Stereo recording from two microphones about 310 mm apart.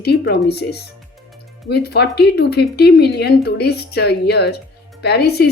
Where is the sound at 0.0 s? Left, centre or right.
Left.